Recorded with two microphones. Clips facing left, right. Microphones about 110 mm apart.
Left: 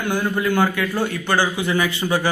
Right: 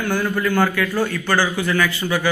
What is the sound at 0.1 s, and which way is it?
A man's voice, 20° left (ahead or behind).